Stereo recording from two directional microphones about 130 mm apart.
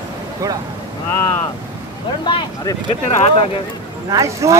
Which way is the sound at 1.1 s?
20° left (ahead or behind).